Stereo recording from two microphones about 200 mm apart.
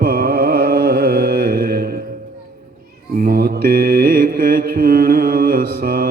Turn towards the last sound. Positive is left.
turn(degrees=-45)  # may be behind; listen again after turning